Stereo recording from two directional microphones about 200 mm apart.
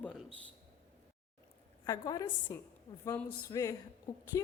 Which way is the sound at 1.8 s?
20° left (ahead or behind).